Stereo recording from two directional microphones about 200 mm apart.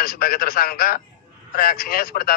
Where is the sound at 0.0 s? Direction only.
50° left (ahead or behind).